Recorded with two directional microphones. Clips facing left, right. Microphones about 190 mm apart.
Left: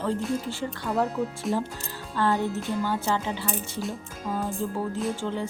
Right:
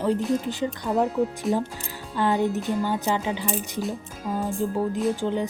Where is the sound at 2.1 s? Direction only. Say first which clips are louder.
Right 2 dB; 15° right (ahead or behind).